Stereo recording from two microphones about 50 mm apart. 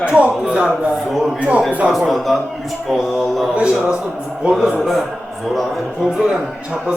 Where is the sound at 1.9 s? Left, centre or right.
Centre.